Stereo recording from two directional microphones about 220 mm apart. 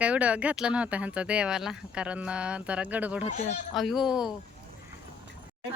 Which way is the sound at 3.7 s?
Centre (ahead or behind).